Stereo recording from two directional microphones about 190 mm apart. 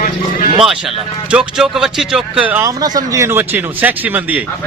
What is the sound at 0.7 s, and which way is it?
A man's voice, centre (ahead or behind).